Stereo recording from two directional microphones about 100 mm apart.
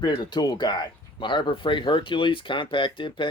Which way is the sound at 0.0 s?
50° left (ahead or behind).